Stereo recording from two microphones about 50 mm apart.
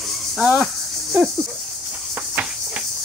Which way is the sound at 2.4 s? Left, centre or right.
Right.